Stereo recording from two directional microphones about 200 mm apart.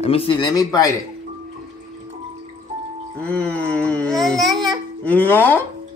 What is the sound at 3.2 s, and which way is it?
Baby cry, 5° left (ahead or behind).